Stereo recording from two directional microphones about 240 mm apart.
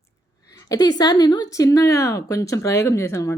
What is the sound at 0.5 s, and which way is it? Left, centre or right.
A woman's voice, centre.